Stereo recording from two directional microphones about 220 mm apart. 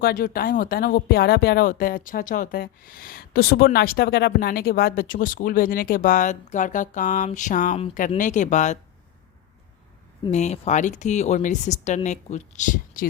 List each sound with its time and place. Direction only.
0.0 s speech: 45° left (ahead or behind)
10.2 s speech: 30° left (ahead or behind)